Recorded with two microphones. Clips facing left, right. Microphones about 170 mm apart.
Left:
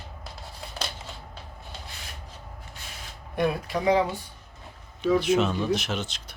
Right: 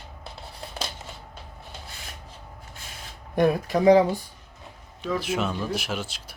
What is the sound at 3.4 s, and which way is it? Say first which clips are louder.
Speech: right 5 dB; 45° right (ahead or behind).